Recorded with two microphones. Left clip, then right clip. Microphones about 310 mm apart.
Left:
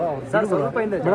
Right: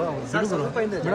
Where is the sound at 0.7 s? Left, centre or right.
Centre.